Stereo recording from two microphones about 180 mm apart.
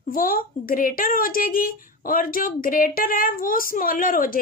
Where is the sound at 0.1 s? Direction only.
50° left (ahead or behind).